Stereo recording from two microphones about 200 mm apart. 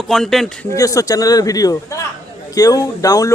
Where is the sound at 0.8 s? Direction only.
15° left (ahead or behind).